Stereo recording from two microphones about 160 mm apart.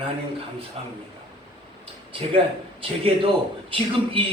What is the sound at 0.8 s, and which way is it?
Speech, 40° right (ahead or behind).